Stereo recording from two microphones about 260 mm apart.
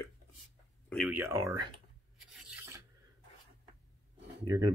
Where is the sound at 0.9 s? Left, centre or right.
Centre.